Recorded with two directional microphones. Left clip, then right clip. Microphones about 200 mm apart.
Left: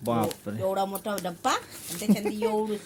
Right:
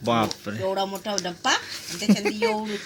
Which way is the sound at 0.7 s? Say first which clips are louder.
Right 2 dB; 30° left (ahead or behind).